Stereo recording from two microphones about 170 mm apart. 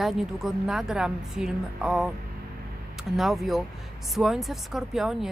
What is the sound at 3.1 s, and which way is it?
A woman's voice, centre (ahead or behind).